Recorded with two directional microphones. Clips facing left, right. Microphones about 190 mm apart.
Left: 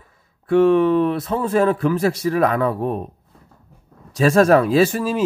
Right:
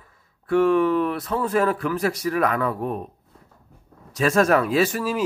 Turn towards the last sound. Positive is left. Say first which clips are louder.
# left 4 dB
turn(degrees=25)  # may be behind; listen again after turning